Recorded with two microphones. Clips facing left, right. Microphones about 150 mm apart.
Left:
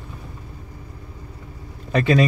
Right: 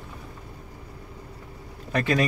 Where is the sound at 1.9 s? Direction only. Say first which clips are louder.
Left 6 dB; 65° left (ahead or behind).